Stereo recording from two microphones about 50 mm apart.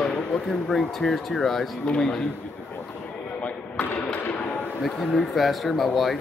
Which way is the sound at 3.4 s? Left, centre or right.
Left.